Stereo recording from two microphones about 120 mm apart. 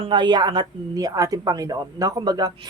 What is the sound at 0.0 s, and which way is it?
A woman's voice, 40° right (ahead or behind).